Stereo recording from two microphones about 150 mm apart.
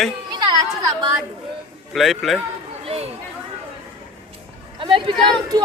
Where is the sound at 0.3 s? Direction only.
30° right (ahead or behind).